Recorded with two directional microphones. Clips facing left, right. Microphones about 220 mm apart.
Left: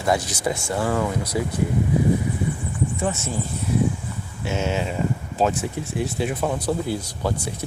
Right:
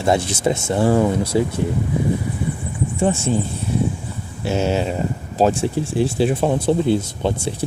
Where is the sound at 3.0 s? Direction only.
30° right (ahead or behind).